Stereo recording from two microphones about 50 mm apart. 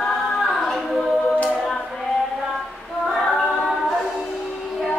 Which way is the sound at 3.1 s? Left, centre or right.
Centre.